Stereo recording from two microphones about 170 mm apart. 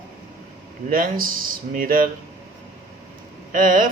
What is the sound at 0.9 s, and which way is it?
Speech, 55° right (ahead or behind).